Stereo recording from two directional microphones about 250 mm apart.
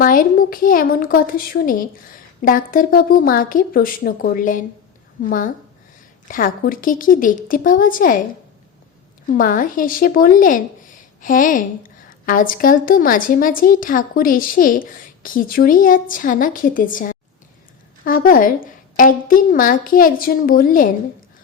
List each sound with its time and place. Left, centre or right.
0.0 s speech: left
9.3 s speech: left